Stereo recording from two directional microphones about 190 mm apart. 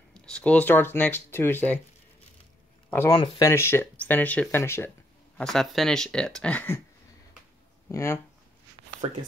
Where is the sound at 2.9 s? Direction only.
10° left (ahead or behind).